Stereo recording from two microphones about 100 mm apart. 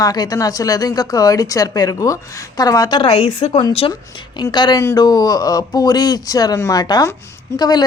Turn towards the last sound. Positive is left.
turn(degrees=40)  # may be behind; listen again after turning